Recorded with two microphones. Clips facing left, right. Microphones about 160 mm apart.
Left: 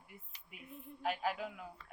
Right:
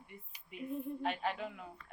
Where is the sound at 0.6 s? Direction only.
40° right (ahead or behind).